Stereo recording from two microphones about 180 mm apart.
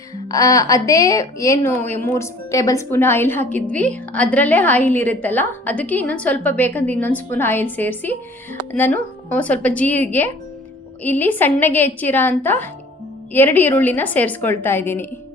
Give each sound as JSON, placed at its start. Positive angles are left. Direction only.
{"t": 0.3, "sound": "a woman's voice", "side_deg": 20}